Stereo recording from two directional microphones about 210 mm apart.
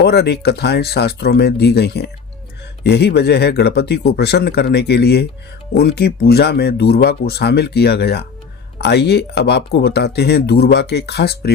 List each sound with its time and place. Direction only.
0.0 s speech: 50° left (ahead or behind)